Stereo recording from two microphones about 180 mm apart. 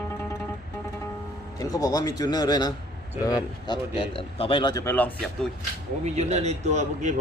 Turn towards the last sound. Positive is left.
turn(degrees=-40)  # may be behind; listen again after turning